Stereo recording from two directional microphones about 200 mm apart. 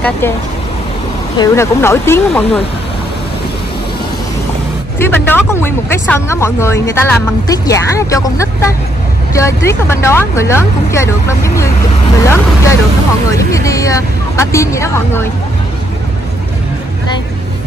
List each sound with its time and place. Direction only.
1.4 s speech: 15° left (ahead or behind)
4.9 s speech: 10° left (ahead or behind)